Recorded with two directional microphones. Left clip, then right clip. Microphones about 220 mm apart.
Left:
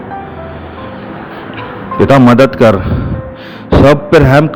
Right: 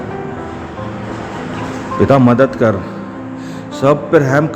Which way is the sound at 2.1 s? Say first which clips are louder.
Left 5 dB; 30° left (ahead or behind).